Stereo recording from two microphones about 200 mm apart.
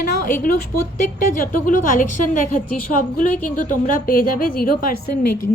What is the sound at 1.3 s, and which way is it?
A woman's voice, 45° left (ahead or behind).